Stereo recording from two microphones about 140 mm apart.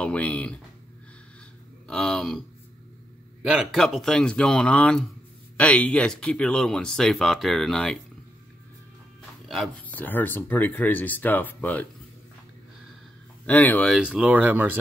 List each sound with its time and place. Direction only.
0.0 s speech: 10° left (ahead or behind)
1.9 s speech: 5° left (ahead or behind)
3.4 s speech: centre (ahead or behind)
9.8 s speech: 10° left (ahead or behind)
13.5 s speech: 10° left (ahead or behind)
13.9 s speech: 5° right (ahead or behind)